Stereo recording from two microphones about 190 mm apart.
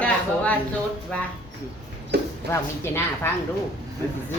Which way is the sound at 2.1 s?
60° right (ahead or behind).